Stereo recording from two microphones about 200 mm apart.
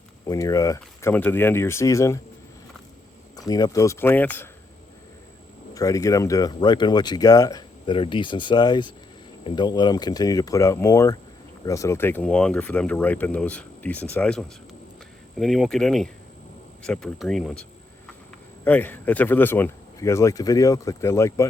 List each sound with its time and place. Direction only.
0.3 s speech: 15° left (ahead or behind)
3.3 s speech: 20° left (ahead or behind)
5.7 s speech: 15° left (ahead or behind)